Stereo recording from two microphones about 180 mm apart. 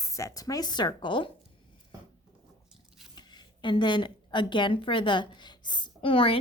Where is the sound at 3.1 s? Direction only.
25° left (ahead or behind).